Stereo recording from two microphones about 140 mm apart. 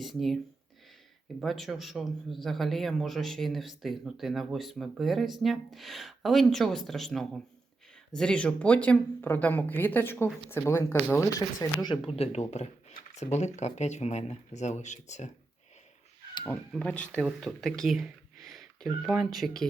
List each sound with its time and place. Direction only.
0.0 s speech: centre (ahead or behind)
1.4 s a man's voice: centre (ahead or behind); by 11.9 s 25° left (ahead or behind)
12.0 s speech: 45° left (ahead or behind)
16.5 s speech: 10° left (ahead or behind)